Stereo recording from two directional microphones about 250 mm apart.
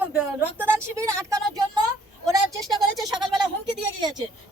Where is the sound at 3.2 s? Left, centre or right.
Centre.